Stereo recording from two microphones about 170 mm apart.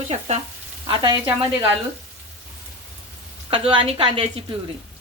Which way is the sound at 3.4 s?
30° right (ahead or behind).